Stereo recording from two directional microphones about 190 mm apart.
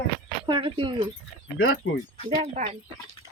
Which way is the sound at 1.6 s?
90° left.